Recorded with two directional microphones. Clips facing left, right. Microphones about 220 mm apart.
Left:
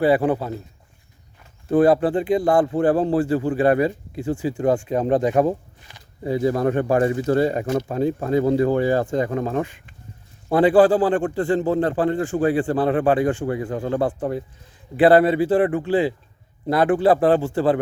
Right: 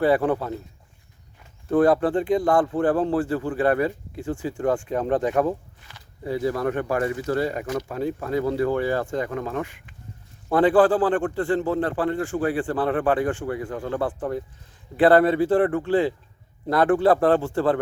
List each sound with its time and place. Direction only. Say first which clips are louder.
0.0 s a man's voice: left 2 dB; 5° left (ahead or behind)
1.7 s speech: left 2 dB; 5° left (ahead or behind); by 9.9 s 30° left (ahead or behind)
10.5 s speech: left 3 dB; 10° left (ahead or behind)
13.5 s speech: left 4 dB; 25° left (ahead or behind)
14.9 s a man's voice: left 2 dB; 5° left (ahead or behind)